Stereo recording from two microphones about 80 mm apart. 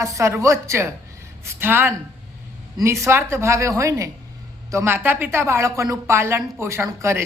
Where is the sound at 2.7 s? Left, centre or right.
Right.